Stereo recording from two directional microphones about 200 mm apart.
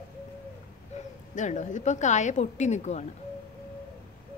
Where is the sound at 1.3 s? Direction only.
40° left (ahead or behind).